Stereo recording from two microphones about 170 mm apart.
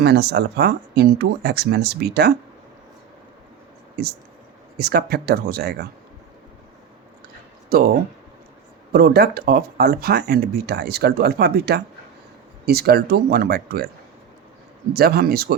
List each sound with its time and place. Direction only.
0.0 s speech: 75° right (ahead or behind)
4.0 s speech: 70° right (ahead or behind)
7.7 s speech: 65° right (ahead or behind)
8.9 s speech: 65° right (ahead or behind)
14.9 s speech: 65° right (ahead or behind)